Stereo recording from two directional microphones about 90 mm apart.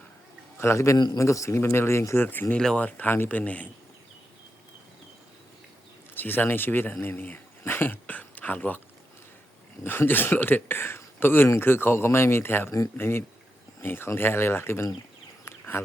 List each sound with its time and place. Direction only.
0.5 s a man's voice: 30° left (ahead or behind)
0.9 s a man's voice: 50° left (ahead or behind)
1.2 s speech: 35° left (ahead or behind)
2.6 s speech: 10° left (ahead or behind)
6.1 s speech: 20° left (ahead or behind)
9.8 s speech: 25° left (ahead or behind)
15.4 s bird: 30° left (ahead or behind)